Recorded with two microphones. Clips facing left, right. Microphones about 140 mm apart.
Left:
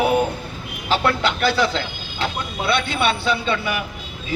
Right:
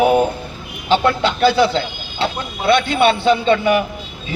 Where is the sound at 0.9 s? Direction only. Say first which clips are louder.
Right 4 dB; 30° right (ahead or behind).